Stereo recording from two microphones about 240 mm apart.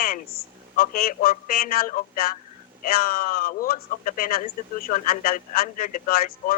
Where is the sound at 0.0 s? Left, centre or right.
Left.